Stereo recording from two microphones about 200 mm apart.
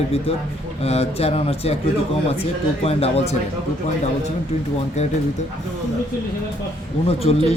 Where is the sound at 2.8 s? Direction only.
30° left (ahead or behind).